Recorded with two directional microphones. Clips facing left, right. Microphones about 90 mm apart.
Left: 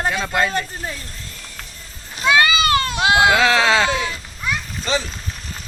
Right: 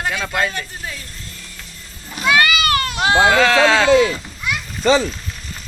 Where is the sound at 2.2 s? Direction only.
20° left (ahead or behind).